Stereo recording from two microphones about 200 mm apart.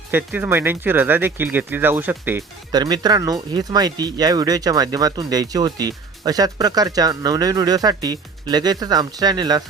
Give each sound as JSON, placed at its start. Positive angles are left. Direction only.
{"t": 0.1, "sound": "speech", "side_deg": -10}
{"t": 2.7, "sound": "speech", "side_deg": -20}